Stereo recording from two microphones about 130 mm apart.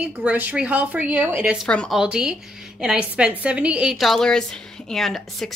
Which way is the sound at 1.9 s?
5° right (ahead or behind).